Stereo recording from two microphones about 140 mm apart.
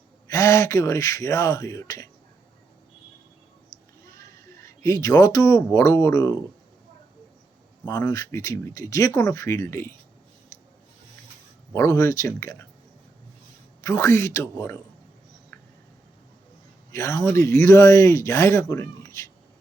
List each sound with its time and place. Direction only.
0.3 s speech: 20° left (ahead or behind)
4.0 s speech: 20° left (ahead or behind)
7.9 s speech: 20° left (ahead or behind)
11.7 s speech: 20° left (ahead or behind)
13.8 s speech: 20° left (ahead or behind)
16.9 s speech: 20° left (ahead or behind)